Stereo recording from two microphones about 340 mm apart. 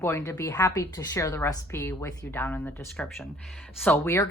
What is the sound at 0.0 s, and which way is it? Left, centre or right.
A woman's voice, centre.